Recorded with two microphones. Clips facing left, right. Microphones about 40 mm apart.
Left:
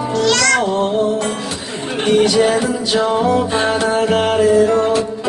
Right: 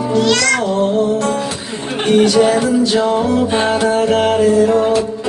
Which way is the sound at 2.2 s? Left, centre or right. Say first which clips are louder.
Right 2 dB; centre.